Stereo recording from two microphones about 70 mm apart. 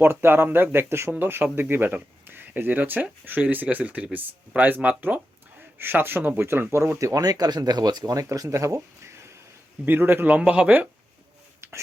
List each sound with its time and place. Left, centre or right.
0.0 s speech: right
8.1 s speech: right
9.8 s speech: right
11.6 s a sound: right